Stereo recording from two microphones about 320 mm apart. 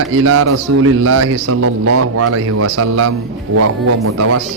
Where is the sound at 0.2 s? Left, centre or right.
Right.